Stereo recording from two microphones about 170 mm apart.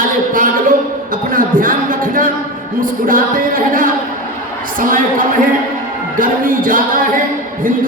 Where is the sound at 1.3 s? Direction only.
55° right (ahead or behind).